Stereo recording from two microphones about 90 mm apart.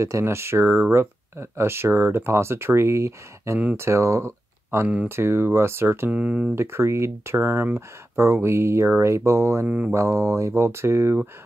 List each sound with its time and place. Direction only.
0.0 s speech: 30° right (ahead or behind)
6.1 s speech: 15° right (ahead or behind)
6.5 s speech: 30° right (ahead or behind)
9.7 s speech: 15° right (ahead or behind)
9.9 s speech: 30° right (ahead or behind)